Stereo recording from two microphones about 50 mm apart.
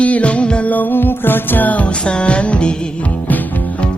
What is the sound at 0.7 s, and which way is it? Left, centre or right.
Music, left.